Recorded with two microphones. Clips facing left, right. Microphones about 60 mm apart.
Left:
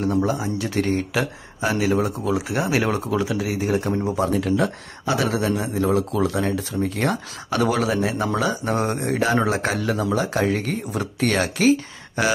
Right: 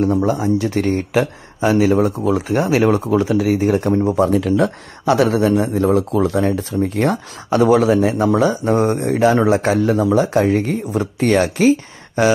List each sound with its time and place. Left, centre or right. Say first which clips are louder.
0.0 s speech: right 5 dB; right
2.2 s speech: right 6 dB; right
2.7 s speech: right 7 dB; right
3.1 s speech: right 8 dB; right
7.0 s speech: right 5 dB; right